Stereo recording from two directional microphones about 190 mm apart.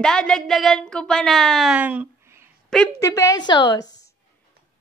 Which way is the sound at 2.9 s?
15° left (ahead or behind).